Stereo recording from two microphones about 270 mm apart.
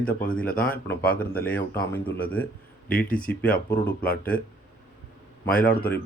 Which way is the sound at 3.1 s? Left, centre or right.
Centre.